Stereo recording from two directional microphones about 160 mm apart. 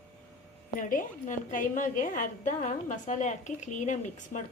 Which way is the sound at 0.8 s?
55° left (ahead or behind).